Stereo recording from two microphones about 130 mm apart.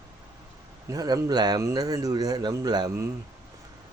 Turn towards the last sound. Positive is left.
turn(degrees=-30)  # may be behind; listen again after turning